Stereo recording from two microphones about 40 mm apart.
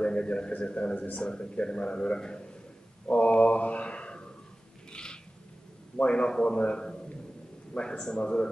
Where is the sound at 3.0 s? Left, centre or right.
Left.